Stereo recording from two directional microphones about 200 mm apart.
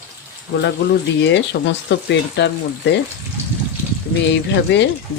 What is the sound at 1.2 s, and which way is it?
Speech, 60° left (ahead or behind).